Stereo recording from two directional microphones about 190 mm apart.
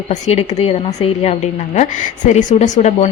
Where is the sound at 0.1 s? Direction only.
35° left (ahead or behind).